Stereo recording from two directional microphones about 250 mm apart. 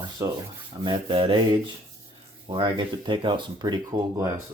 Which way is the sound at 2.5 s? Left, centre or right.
Centre.